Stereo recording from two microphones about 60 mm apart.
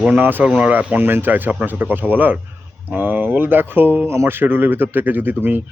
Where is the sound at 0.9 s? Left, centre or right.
Right.